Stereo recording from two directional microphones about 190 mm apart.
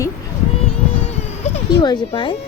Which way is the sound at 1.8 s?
25° left (ahead or behind).